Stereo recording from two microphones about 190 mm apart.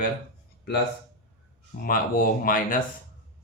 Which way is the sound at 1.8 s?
45° left (ahead or behind).